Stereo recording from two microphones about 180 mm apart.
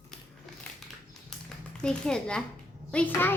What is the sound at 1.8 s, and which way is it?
A child's voice, 5° left (ahead or behind).